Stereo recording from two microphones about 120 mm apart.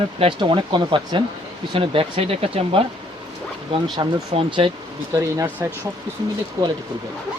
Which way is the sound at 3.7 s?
45° right (ahead or behind).